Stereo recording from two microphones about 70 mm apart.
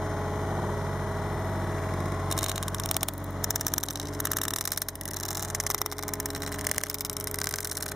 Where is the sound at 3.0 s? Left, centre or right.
Centre.